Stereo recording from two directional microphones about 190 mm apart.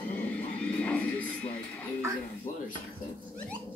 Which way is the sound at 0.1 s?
5° left (ahead or behind).